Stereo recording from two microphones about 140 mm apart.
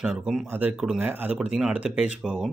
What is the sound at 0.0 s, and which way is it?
Speech, 5° right (ahead or behind).